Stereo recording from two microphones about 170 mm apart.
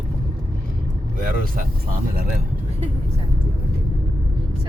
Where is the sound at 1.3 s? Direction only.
55° right (ahead or behind).